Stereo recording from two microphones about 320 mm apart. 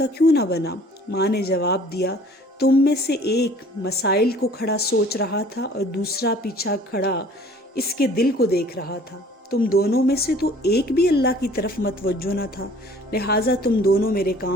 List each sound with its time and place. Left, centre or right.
0.0 s a woman's voice: left